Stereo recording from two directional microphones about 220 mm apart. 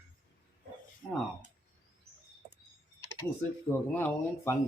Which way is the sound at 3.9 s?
10° left (ahead or behind).